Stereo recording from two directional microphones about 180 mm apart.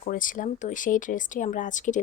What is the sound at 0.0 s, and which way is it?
Speech, 50° left (ahead or behind).